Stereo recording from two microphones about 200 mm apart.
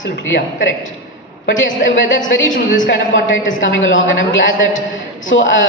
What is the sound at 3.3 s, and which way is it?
A man's voice, 70° left (ahead or behind).